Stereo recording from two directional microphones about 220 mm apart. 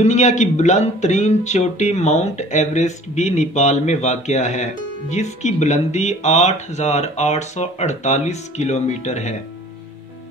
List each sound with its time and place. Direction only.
0.0 s speech: 30° left (ahead or behind)